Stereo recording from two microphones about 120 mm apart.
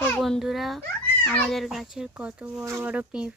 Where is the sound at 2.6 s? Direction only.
25° right (ahead or behind).